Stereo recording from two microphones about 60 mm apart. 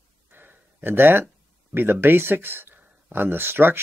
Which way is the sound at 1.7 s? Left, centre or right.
Right.